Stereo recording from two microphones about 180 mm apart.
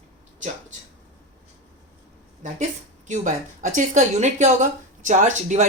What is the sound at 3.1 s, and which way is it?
Speech, 45° right (ahead or behind).